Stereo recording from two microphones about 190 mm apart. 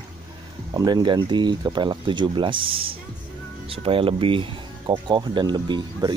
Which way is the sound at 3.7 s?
30° right (ahead or behind).